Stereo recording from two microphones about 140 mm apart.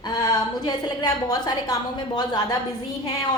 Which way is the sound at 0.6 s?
30° left (ahead or behind).